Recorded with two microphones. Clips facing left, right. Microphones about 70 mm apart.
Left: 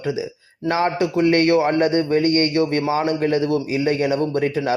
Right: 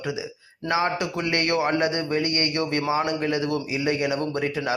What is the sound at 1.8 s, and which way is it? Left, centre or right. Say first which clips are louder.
Speech: left 6 dB; left.